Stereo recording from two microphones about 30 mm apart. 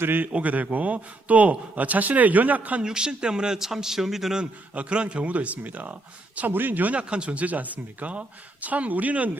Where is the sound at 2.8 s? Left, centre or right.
Right.